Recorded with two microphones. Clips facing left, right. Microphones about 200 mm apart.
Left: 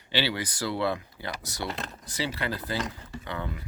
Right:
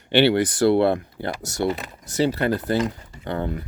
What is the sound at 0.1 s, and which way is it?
Speech, 60° right (ahead or behind).